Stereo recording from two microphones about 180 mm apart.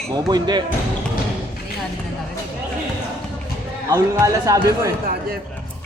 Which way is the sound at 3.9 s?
15° right (ahead or behind).